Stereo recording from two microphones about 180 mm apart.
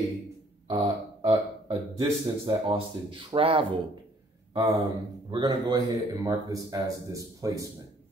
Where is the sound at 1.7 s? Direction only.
20° right (ahead or behind).